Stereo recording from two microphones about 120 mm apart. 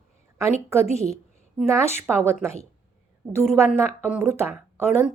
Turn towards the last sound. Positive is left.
turn(degrees=-20)  # may be behind; listen again after turning